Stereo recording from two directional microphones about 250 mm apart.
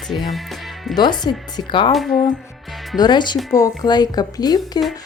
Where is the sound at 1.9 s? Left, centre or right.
Centre.